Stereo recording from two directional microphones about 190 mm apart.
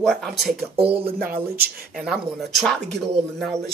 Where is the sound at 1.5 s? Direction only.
55° right (ahead or behind).